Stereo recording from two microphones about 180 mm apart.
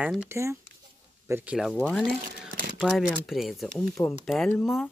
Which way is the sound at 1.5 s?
5° left (ahead or behind).